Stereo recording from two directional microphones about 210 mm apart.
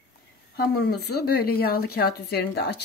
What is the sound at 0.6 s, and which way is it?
Speech, 50° left (ahead or behind).